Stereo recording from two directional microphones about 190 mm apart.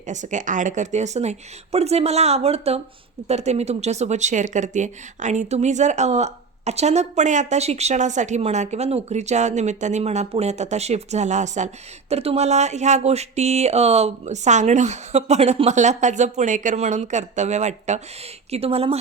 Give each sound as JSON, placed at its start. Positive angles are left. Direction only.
{"t": 0.0, "sound": "speech", "side_deg": -40}